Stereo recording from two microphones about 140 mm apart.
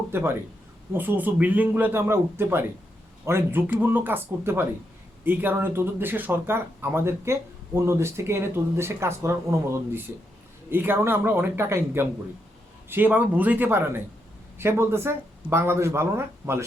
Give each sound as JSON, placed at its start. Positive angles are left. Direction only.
{"t": 0.1, "sound": "a man's voice", "side_deg": -15}
{"t": 10.7, "sound": "speech", "side_deg": -15}